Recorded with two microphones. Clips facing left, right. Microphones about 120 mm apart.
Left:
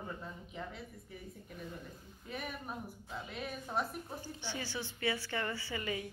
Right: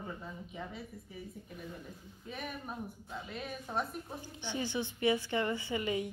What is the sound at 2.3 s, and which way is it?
A woman's voice, centre (ahead or behind).